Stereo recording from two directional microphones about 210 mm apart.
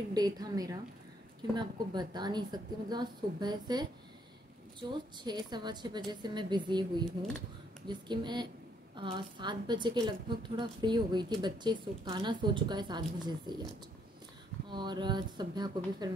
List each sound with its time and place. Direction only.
0.1 s a woman's voice: 20° right (ahead or behind)
14.7 s a woman's voice: 20° right (ahead or behind)